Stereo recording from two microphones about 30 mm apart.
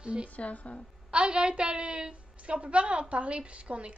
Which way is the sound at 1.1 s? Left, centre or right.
Right.